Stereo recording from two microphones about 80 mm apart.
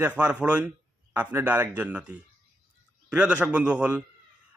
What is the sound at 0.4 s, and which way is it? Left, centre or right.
A man's voice, centre.